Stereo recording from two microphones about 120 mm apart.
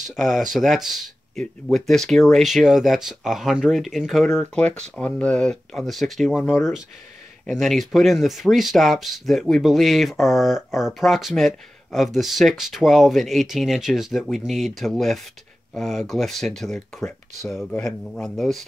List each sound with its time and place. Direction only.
0.1 s speech: centre (ahead or behind)